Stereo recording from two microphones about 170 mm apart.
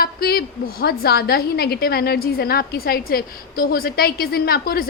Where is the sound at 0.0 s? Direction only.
65° left (ahead or behind).